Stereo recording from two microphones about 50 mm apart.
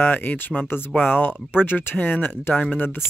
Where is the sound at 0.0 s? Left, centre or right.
Left.